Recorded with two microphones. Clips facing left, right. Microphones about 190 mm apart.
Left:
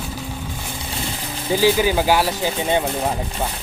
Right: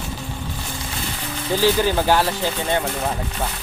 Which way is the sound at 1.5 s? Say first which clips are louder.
Left 2 dB; 10° left (ahead or behind).